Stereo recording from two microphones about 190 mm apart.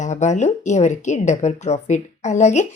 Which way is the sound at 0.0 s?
40° left (ahead or behind).